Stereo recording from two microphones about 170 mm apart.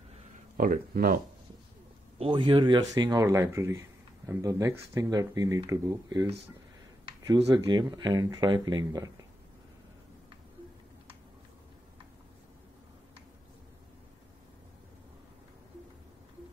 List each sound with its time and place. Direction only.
0.6 s speech: 60° right (ahead or behind)
2.1 s speech: 30° right (ahead or behind)
7.5 s speech: 25° right (ahead or behind)